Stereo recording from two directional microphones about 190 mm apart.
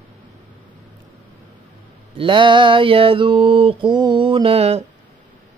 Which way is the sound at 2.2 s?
25° right (ahead or behind).